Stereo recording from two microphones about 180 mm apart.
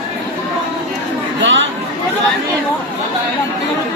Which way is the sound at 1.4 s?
90° right.